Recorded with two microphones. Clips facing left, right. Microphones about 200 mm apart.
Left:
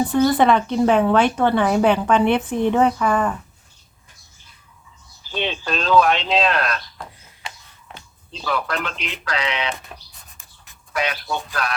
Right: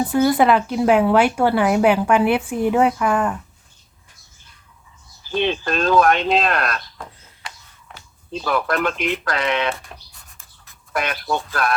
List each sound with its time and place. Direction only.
0.0 s speech: 5° right (ahead or behind)
5.5 s speech: 50° right (ahead or behind)
7.9 s a sound: 20° left (ahead or behind)
8.3 s speech: 50° right (ahead or behind)
10.9 s speech: 50° right (ahead or behind)